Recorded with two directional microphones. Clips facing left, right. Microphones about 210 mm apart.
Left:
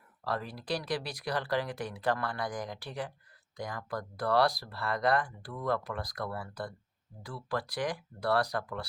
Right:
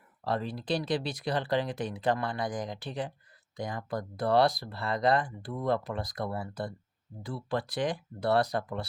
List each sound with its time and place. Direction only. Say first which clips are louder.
0.3 s speech: right 4 dB; 25° right (ahead or behind)